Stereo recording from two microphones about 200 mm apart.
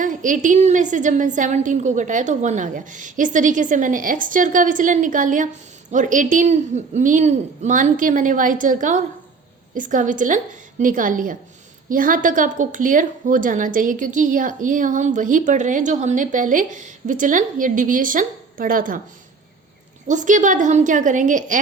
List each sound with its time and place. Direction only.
0.0 s a woman's voice: 40° right (ahead or behind)
20.1 s a woman's voice: 40° right (ahead or behind)